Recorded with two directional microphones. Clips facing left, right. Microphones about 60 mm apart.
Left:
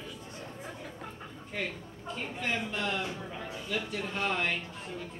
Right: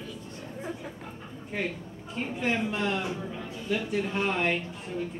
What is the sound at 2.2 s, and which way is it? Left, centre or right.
Speech, centre.